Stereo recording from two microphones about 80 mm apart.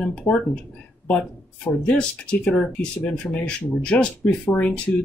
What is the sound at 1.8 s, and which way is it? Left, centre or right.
Speech, centre.